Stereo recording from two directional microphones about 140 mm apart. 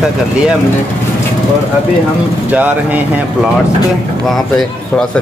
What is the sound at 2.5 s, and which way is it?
Speech, 10° right (ahead or behind).